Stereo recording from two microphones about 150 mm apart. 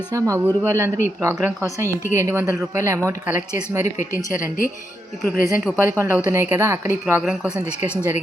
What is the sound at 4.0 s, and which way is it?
Speech, 65° left (ahead or behind).